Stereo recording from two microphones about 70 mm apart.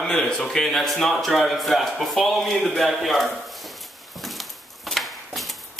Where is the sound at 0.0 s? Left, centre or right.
Centre.